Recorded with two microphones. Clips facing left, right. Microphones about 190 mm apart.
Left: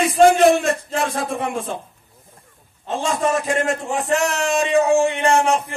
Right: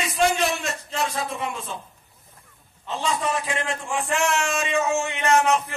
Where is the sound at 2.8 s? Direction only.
45° left (ahead or behind).